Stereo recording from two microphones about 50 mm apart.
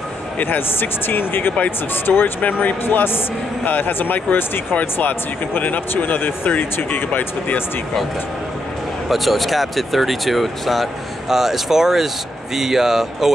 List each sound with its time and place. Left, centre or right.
0.4 s a man's voice: left
9.1 s speech: centre